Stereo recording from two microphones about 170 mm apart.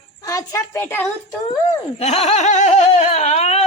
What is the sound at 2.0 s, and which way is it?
Speech, 40° left (ahead or behind).